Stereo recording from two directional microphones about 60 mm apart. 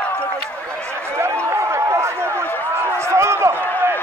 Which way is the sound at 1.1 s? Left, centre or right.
Right.